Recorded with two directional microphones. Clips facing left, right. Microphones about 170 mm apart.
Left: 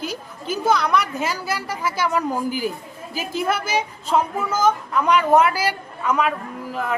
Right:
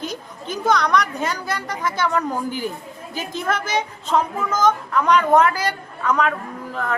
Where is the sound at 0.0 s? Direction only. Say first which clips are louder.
Even; 10° left (ahead or behind).